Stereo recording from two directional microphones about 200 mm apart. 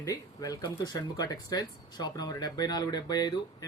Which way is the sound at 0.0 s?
15° left (ahead or behind).